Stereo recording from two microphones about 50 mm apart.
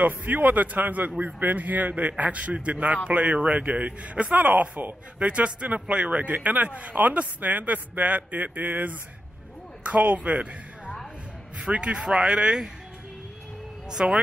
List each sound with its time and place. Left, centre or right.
0.0 s a man's voice: right
11.6 s a man's voice: right
14.0 s a man's voice: right